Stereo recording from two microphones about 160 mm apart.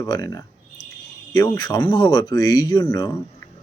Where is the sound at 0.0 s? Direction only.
25° left (ahead or behind).